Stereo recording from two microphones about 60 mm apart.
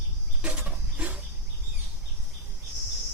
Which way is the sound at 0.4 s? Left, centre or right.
Right.